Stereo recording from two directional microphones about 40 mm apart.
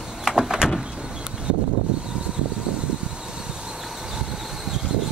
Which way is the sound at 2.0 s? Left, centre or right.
Right.